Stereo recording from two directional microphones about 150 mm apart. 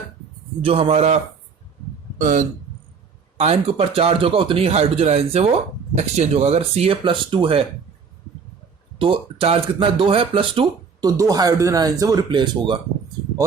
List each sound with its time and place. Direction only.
0.6 s speech: 40° right (ahead or behind)
3.3 s speech: 45° right (ahead or behind)
9.0 s speech: 35° right (ahead or behind)
11.0 s speech: 25° right (ahead or behind)